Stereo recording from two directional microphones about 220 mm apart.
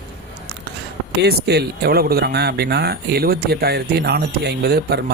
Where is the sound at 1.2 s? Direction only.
50° right (ahead or behind).